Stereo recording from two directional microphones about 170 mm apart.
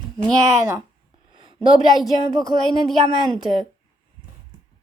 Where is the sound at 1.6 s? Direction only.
30° right (ahead or behind).